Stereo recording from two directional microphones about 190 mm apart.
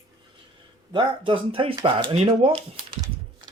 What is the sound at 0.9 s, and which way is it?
Speech, 25° right (ahead or behind).